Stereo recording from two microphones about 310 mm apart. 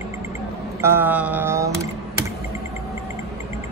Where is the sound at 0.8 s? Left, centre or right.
Centre.